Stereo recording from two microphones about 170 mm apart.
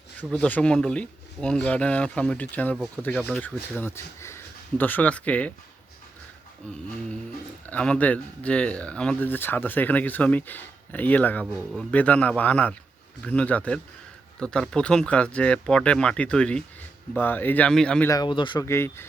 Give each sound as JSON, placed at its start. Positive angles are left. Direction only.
{"t": 0.2, "sound": "speech", "side_deg": 10}
{"t": 7.7, "sound": "speech", "side_deg": 5}
{"t": 11.5, "sound": "speech", "side_deg": -5}
{"t": 11.9, "sound": "speech", "side_deg": 10}
{"t": 18.1, "sound": "speech", "side_deg": 25}
{"t": 18.6, "sound": "speech", "side_deg": 15}